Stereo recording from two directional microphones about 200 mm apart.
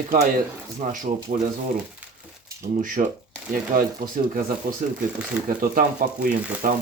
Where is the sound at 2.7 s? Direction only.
40° right (ahead or behind).